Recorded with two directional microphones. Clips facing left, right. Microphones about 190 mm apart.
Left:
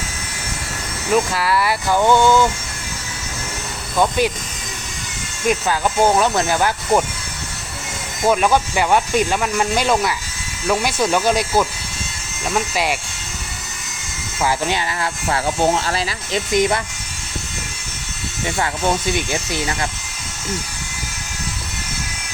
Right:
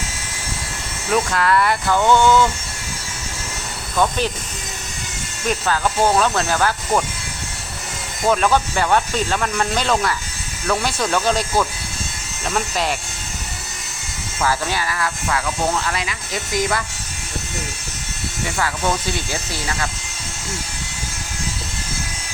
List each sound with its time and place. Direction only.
1.1 s speech: 5° left (ahead or behind)
3.9 s speech: 10° left (ahead or behind)
5.5 s speech: 10° left (ahead or behind)
8.3 s speech: 10° left (ahead or behind)
14.4 s speech: 20° left (ahead or behind)
18.5 s speech: 20° left (ahead or behind)